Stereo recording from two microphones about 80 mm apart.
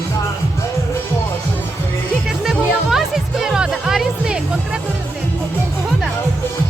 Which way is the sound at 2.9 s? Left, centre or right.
Centre.